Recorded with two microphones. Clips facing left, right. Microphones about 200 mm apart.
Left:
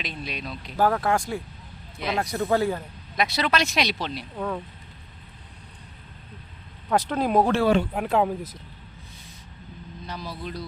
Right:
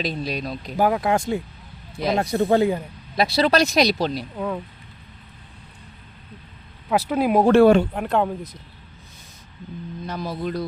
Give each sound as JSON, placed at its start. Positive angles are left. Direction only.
{"t": 0.0, "sound": "speech", "side_deg": -35}
{"t": 0.8, "sound": "speech", "side_deg": -15}
{"t": 2.0, "sound": "speech", "side_deg": -35}
{"t": 3.2, "sound": "speech", "side_deg": -35}
{"t": 4.4, "sound": "speech", "side_deg": -5}
{"t": 6.9, "sound": "speech", "side_deg": -10}
{"t": 7.5, "sound": "speech", "side_deg": -55}
{"t": 7.9, "sound": "speech", "side_deg": 5}
{"t": 10.1, "sound": "speech", "side_deg": -50}